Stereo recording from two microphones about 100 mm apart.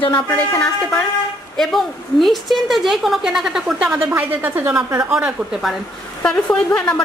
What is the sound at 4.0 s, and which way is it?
Speech, 20° right (ahead or behind).